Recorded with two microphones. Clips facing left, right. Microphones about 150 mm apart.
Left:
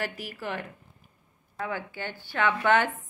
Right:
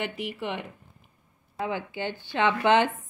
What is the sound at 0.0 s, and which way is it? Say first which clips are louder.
Speech: right 2 dB; 25° right (ahead or behind).